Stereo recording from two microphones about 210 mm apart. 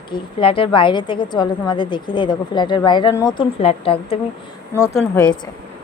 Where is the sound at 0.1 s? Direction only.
25° left (ahead or behind).